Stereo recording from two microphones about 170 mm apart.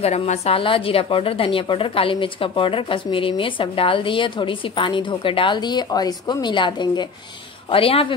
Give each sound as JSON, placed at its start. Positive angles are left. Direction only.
{"t": 0.0, "sound": "a woman's voice", "side_deg": 40}